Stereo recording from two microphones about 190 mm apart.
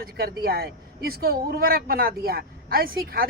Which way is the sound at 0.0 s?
55° right (ahead or behind).